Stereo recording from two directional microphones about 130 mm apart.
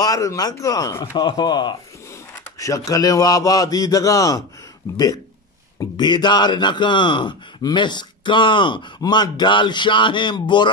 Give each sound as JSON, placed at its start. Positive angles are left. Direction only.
{"t": 0.0, "sound": "speech", "side_deg": 25}